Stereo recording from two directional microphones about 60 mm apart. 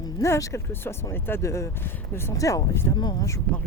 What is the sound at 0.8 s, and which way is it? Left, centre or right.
Speech, left.